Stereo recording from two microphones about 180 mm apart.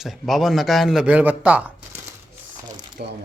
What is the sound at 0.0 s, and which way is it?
A man's voice, centre (ahead or behind).